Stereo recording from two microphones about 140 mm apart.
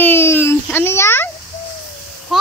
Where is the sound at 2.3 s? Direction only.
Centre (ahead or behind).